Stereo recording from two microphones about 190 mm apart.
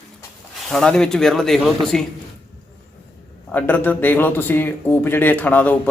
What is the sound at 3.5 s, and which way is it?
Speech, 10° left (ahead or behind).